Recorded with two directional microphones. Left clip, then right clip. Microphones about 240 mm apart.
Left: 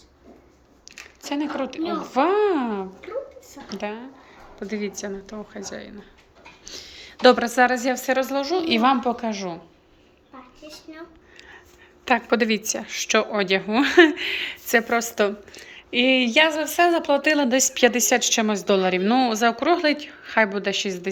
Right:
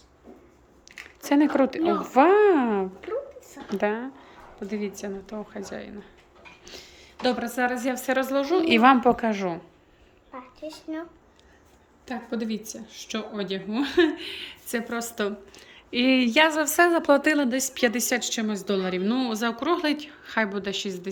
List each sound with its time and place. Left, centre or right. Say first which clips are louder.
0.9 s squish: left 1 dB; centre
1.2 s a woman's voice: right 6 dB; centre
4.6 s a woman's voice: left 3 dB; centre
6.7 s a sound: left 6 dB; centre
7.0 s a woman's voice: left 10 dB; centre
10.9 s a woman's voice: right 7 dB; centre
12.0 s a woman's voice: left 12 dB; centre